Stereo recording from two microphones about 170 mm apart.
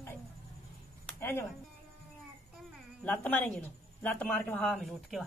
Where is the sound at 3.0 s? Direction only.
10° left (ahead or behind).